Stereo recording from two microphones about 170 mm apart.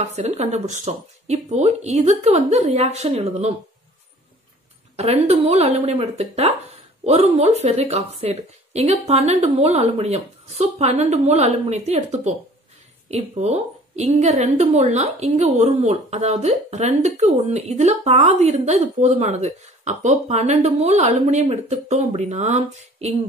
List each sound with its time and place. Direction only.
0.0 s a woman's voice: 40° right (ahead or behind)
4.9 s a woman's voice: 40° right (ahead or behind)